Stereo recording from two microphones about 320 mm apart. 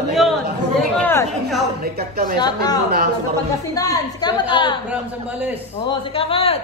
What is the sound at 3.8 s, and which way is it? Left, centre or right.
Speech, centre.